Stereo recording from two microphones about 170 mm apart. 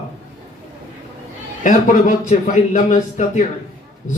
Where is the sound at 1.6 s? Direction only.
50° left (ahead or behind).